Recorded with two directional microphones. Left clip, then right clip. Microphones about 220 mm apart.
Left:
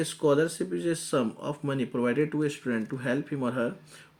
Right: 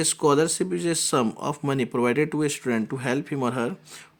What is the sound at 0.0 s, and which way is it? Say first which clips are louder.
Speech: right 4 dB; 45° right (ahead or behind).